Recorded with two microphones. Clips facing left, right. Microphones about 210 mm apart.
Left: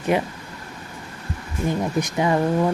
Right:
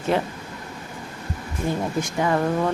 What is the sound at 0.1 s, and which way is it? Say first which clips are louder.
Speech: left 1 dB; 15° left (ahead or behind).